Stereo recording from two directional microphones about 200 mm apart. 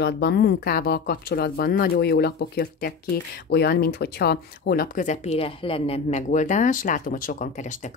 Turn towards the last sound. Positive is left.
turn(degrees=35)  # may be behind; listen again after turning